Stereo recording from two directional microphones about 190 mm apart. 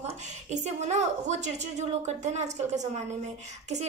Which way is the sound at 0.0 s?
35° right (ahead or behind).